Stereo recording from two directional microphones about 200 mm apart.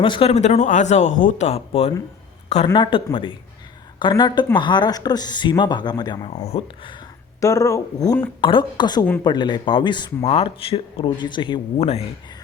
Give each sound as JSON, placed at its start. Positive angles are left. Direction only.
{"t": 0.0, "sound": "speech", "side_deg": 25}
{"t": 6.4, "sound": "speech", "side_deg": 30}
{"t": 7.4, "sound": "speech", "side_deg": 15}